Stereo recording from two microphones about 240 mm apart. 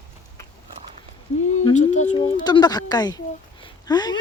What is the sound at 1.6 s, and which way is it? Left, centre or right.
Speech, left.